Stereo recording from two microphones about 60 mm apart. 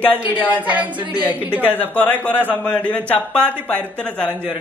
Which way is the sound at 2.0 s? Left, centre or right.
Left.